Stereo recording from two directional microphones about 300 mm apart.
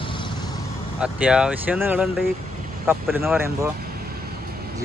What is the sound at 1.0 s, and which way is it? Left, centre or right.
Speech, centre.